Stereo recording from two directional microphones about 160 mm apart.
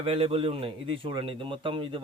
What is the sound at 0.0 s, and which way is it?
A man's voice, 35° right (ahead or behind).